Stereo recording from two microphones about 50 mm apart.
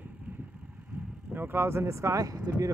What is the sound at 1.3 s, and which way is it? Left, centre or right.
Speech, right.